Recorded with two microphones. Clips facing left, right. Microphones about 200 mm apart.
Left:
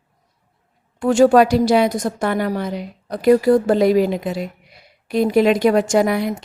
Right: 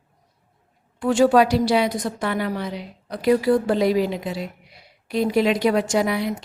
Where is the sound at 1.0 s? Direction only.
45° left (ahead or behind).